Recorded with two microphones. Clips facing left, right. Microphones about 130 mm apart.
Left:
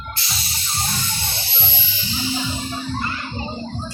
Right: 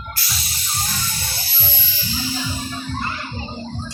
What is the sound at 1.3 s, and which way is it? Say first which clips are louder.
Music: left 1 dB; 25° left (ahead or behind).